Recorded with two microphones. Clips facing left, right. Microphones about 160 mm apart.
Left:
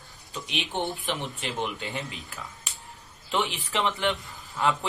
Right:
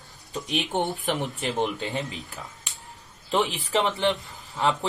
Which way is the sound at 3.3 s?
40° right (ahead or behind).